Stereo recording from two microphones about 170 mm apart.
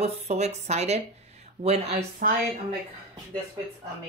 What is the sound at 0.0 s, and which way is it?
Speech, 40° right (ahead or behind).